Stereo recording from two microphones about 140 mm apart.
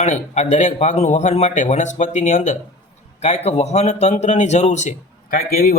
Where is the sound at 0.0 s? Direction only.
55° left (ahead or behind).